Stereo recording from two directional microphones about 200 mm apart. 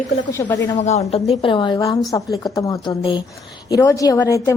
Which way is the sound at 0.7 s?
35° left (ahead or behind).